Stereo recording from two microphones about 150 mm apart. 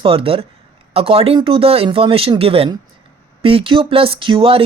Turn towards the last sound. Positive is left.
turn(degrees=-35)  # may be behind; listen again after turning